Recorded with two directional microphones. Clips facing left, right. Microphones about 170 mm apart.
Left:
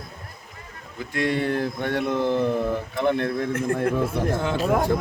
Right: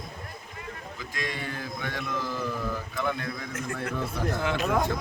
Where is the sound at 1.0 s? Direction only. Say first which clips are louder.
Left 12 dB; 60° left (ahead or behind).